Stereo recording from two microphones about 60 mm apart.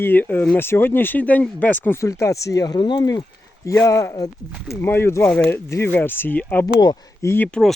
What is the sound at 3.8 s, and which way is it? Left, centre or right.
Speech, left.